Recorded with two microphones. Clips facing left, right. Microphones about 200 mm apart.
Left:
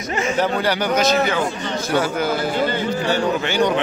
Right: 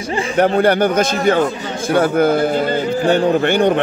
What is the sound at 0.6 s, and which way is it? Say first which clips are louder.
A man's voice: right 6 dB; 55° right (ahead or behind).